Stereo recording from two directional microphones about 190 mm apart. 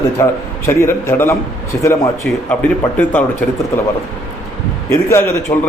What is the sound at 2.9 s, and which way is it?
Speech, 10° left (ahead or behind).